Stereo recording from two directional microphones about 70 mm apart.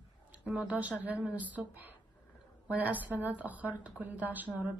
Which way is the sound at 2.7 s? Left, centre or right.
Right.